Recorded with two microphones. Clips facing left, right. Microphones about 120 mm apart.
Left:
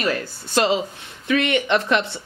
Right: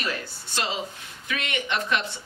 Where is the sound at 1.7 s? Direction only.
70° left (ahead or behind).